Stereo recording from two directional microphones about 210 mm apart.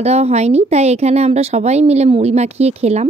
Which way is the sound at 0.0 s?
30° right (ahead or behind).